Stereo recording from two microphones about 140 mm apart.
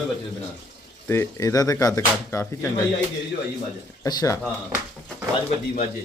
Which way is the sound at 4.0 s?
25° left (ahead or behind).